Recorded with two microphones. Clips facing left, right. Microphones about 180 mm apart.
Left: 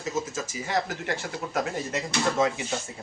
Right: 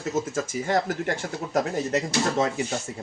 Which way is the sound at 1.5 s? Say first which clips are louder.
Right 5 dB; 40° right (ahead or behind).